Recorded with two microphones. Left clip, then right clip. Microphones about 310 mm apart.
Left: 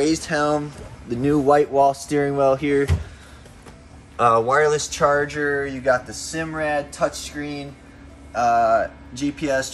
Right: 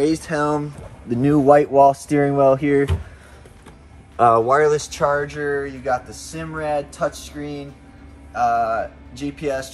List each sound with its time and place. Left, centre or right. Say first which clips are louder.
0.0 s speech: right 1 dB; right
4.2 s speech: right 2 dB; centre